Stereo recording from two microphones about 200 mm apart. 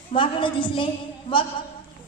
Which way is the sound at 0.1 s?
25° left (ahead or behind).